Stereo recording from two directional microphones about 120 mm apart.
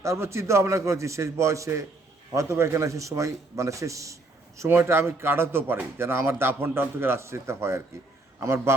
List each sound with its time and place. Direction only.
0.0 s a man's voice: 25° right (ahead or behind)